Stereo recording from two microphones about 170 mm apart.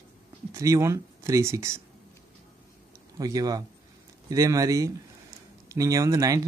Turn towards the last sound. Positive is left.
turn(degrees=-20)  # may be behind; listen again after turning